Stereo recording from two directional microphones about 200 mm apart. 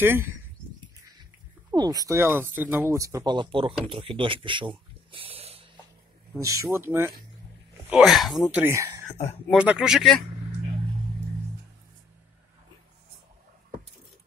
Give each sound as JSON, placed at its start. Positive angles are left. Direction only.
{"t": 0.0, "sound": "speech", "side_deg": -10}
{"t": 1.7, "sound": "speech", "side_deg": -20}
{"t": 6.4, "sound": "speech", "side_deg": -15}
{"t": 7.9, "sound": "speech", "side_deg": 0}